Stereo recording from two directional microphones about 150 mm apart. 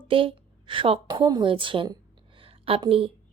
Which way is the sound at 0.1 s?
35° right (ahead or behind).